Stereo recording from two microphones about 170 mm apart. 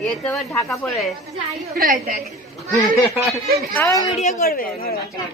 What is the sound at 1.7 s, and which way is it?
Speech, 55° right (ahead or behind).